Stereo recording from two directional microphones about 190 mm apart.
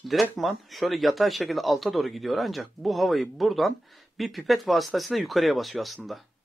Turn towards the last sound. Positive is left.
turn(degrees=0)  # may be behind; listen again after turning